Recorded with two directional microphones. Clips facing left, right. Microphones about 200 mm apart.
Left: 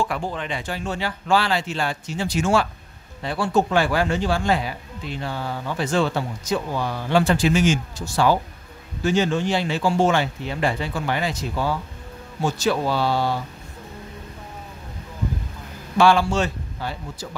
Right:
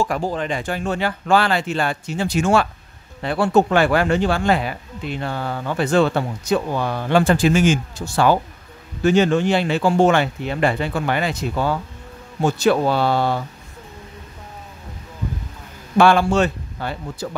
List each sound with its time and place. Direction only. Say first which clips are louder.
0.0 s speech: right 4 dB; 40° right (ahead or behind); by 13.4 s 55° right (ahead or behind)
16.0 s speech: right 3 dB; 55° right (ahead or behind)